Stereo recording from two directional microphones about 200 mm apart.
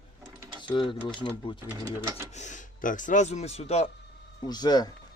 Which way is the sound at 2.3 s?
40° left (ahead or behind).